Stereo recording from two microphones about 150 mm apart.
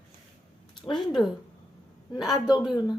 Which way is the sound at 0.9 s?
Centre (ahead or behind).